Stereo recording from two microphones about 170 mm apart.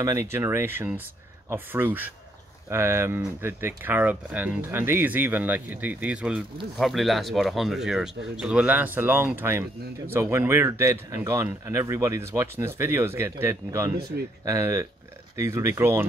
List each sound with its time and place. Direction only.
0.0 s speech: 15° right (ahead or behind)